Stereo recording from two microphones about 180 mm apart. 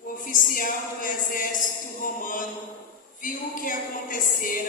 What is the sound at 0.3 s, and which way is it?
Speech, 50° left (ahead or behind).